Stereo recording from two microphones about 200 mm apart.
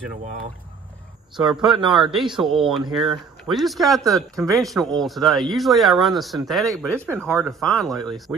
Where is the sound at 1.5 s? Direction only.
Centre (ahead or behind).